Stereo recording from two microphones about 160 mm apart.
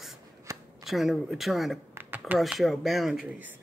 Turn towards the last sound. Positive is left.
turn(degrees=0)  # may be behind; listen again after turning